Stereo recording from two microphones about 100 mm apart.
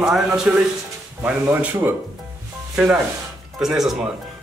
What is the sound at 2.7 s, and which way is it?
Rub, 5° right (ahead or behind).